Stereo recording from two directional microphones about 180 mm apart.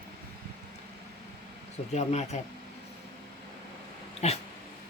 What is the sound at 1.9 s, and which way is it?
Speech, 40° left (ahead or behind).